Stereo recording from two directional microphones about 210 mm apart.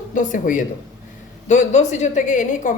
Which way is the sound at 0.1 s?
40° left (ahead or behind).